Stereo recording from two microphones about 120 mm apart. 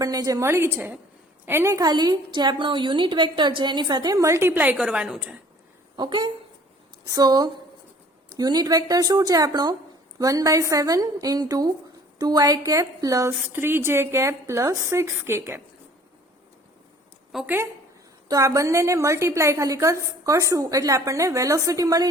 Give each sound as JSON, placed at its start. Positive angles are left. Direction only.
{"t": 0.0, "sound": "a woman's voice", "side_deg": -30}
{"t": 6.0, "sound": "a woman's voice", "side_deg": -40}
{"t": 17.4, "sound": "a woman's voice", "side_deg": -20}